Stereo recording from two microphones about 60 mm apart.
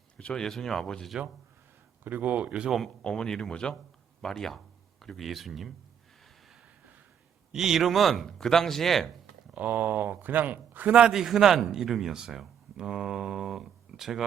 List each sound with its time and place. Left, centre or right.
0.2 s speech: centre
0.4 s speech: centre
2.0 s speech: right
2.6 s speech: centre
3.0 s speech: centre
7.5 s speech: centre
9.6 s speech: right
10.9 s a man's voice: centre